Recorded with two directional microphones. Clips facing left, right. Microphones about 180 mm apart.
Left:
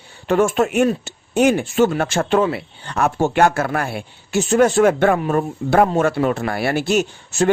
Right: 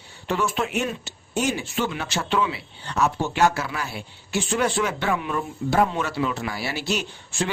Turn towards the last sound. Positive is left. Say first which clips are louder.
# left 10 dB
turn(degrees=45)  # may be behind; listen again after turning